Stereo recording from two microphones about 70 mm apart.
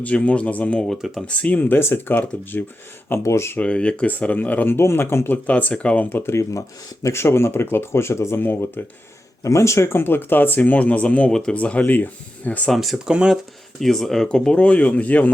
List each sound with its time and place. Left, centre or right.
0.0 s speech: centre
0.8 s speech: centre
1.3 s speech: centre
3.2 s speech: left
3.6 s speech: centre
6.1 s speech: left
9.4 s speech: left; by 11.5 s centre
11.5 s speech: centre
12.7 s speech: centre
13.1 s speech: centre
13.7 s speech: centre; by 15.3 s left